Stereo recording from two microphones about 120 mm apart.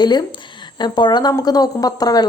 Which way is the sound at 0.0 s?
35° left (ahead or behind).